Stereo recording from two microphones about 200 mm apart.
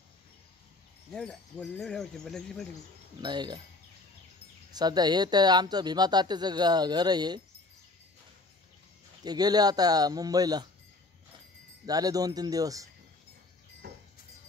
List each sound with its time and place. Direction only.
1.1 s speech: 5° left (ahead or behind)
3.2 s speech: 20° right (ahead or behind)
4.7 s speech: 20° right (ahead or behind)
9.2 s speech: 20° right (ahead or behind)
11.8 s speech: 20° right (ahead or behind)
13.8 s a sound: 50° right (ahead or behind)